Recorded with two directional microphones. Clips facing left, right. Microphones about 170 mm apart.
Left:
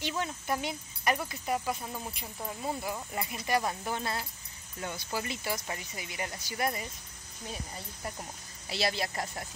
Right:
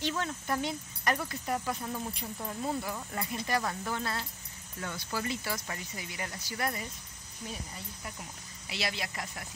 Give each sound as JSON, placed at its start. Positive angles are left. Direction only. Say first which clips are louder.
{"t": 0.0, "sound": "speech", "louder": "right 1 dB", "side_deg": 10}
{"t": 7.7, "sound": "speech", "louder": "left 3 dB", "side_deg": 35}